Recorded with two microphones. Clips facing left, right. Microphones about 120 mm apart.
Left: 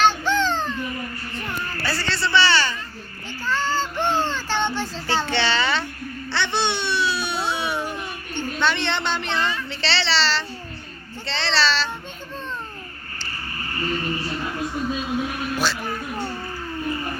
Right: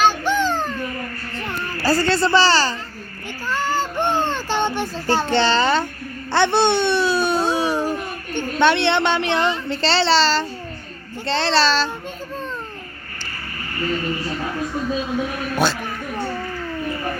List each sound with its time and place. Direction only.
0.0 s a sound: 10° right (ahead or behind)
1.4 s a child's voice: 35° right (ahead or behind)
3.4 s child singing: 10° right (ahead or behind)
4.4 s a sound: 15° right (ahead or behind)
4.9 s a woman's voice: 45° right (ahead or behind)
6.3 s babbling: 50° right (ahead or behind)
9.6 s a woman's voice: 45° right (ahead or behind)